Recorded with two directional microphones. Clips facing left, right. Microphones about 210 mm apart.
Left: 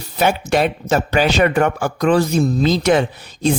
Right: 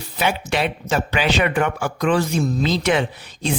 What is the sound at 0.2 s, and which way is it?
A man's voice, 45° left (ahead or behind).